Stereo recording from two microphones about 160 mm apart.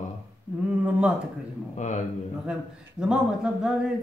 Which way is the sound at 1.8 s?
50° left (ahead or behind).